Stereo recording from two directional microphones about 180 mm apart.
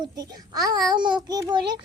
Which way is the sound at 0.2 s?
20° right (ahead or behind).